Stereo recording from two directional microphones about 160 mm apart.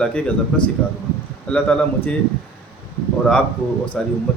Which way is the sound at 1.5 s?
10° left (ahead or behind).